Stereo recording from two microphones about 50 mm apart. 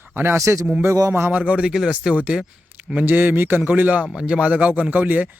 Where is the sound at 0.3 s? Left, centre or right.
Right.